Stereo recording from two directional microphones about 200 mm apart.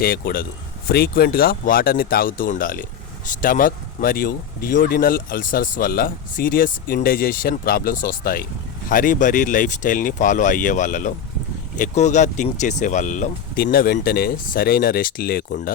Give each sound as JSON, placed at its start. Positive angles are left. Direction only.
{"t": 0.0, "sound": "speech", "side_deg": 50}